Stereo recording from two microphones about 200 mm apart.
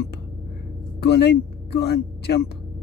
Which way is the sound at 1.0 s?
55° left (ahead or behind).